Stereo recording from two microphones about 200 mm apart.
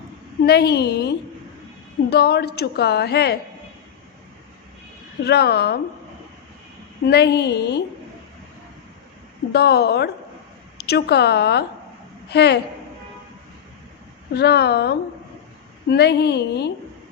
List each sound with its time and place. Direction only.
0.4 s a woman's voice: 55° left (ahead or behind)
5.2 s a woman's voice: 55° left (ahead or behind)
7.0 s a woman's voice: 55° left (ahead or behind)
9.5 s a woman's voice: 55° left (ahead or behind)
14.3 s a woman's voice: 55° left (ahead or behind)